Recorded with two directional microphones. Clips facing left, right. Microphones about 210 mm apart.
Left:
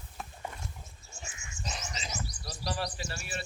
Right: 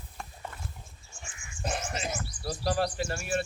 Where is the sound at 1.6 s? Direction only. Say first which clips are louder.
Right 8 dB; 55° right (ahead or behind).